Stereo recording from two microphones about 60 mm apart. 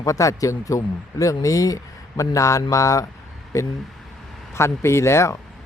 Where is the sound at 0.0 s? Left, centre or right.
Left.